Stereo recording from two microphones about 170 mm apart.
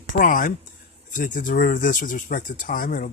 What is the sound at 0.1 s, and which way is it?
Speech, 55° left (ahead or behind).